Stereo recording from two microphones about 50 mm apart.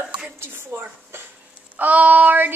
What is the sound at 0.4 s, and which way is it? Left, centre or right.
Speech, right.